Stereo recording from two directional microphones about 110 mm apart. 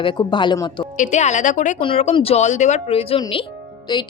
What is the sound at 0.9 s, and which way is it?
Speech, 90° left.